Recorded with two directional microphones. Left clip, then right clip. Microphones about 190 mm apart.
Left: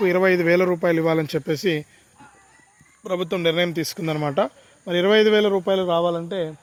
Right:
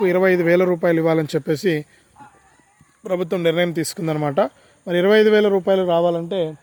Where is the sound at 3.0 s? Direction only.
25° right (ahead or behind).